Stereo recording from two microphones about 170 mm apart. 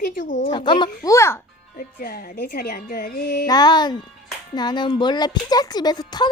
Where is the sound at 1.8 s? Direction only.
60° left (ahead or behind).